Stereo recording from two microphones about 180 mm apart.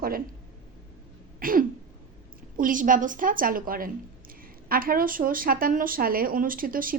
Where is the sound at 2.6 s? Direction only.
50° right (ahead or behind).